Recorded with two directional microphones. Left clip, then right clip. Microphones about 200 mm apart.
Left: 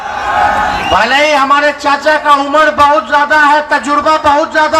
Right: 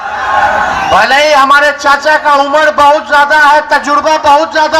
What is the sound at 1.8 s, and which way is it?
Speech, 15° right (ahead or behind).